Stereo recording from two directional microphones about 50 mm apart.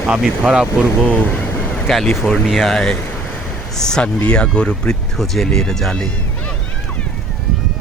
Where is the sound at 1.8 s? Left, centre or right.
Centre.